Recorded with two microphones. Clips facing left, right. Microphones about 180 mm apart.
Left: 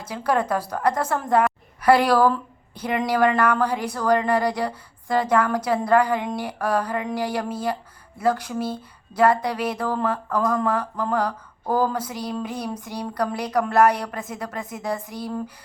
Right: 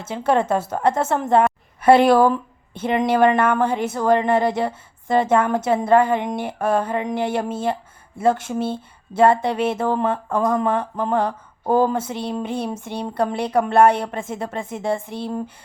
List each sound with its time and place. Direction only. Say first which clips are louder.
0.0 s a woman's voice: right 4 dB; 25° right (ahead or behind)